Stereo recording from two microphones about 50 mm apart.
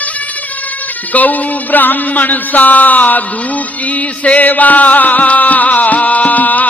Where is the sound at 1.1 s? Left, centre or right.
Left.